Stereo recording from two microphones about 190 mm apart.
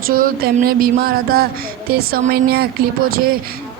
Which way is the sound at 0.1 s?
50° right (ahead or behind).